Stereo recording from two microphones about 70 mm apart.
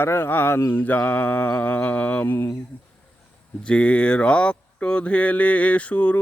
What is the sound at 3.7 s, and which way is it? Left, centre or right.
Mantra, centre.